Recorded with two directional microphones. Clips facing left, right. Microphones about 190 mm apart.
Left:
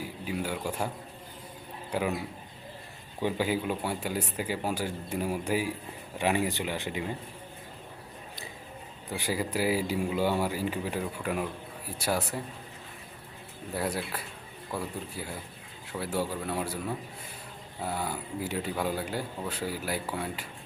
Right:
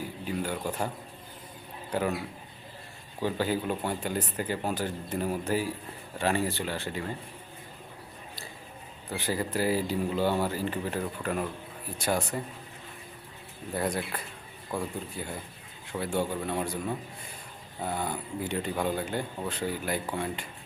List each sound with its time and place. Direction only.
0.3 s speech: 10° left (ahead or behind)
1.9 s a man's voice: 10° left (ahead or behind)
3.2 s speech: 15° left (ahead or behind)
9.0 s speech: 10° left (ahead or behind)
13.7 s speech: 5° left (ahead or behind)